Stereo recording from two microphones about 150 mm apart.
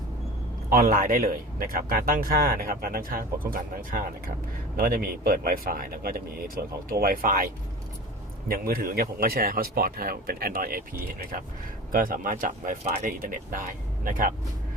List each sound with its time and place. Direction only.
0.7 s speech: 80° right
8.4 s speech: 80° right
11.9 s speech: 70° right (ahead or behind)